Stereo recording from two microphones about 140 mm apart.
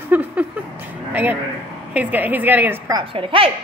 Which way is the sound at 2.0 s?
10° right (ahead or behind).